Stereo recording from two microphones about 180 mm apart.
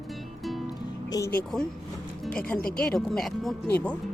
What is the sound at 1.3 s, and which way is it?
Speech, 5° left (ahead or behind).